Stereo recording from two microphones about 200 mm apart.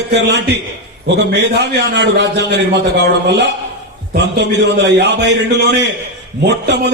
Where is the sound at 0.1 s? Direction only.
60° right (ahead or behind).